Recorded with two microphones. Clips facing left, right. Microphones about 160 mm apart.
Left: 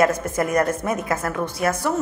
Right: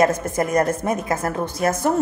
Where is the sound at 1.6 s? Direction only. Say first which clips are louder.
Right 2 dB; 45° right (ahead or behind).